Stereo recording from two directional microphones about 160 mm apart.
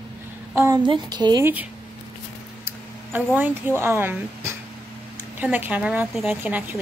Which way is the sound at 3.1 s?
10° right (ahead or behind).